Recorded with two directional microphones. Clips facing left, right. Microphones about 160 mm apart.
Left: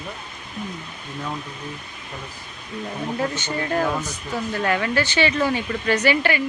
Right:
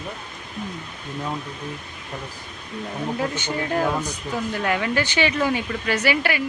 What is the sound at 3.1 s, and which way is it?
Speech, 10° right (ahead or behind).